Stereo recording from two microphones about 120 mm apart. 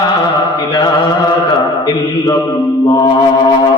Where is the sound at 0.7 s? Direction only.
35° left (ahead or behind).